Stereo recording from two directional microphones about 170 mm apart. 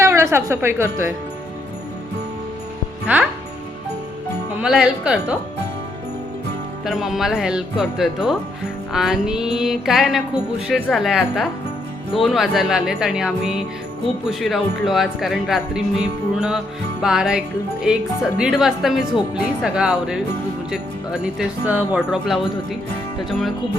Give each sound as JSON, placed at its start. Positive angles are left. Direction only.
{"t": 0.0, "sound": "a woman's voice", "side_deg": -15}
{"t": 3.1, "sound": "speech", "side_deg": -10}
{"t": 4.6, "sound": "speech", "side_deg": -5}
{"t": 6.8, "sound": "speech", "side_deg": 0}